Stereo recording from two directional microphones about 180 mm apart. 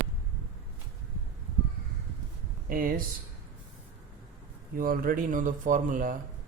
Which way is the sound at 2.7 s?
50° right (ahead or behind).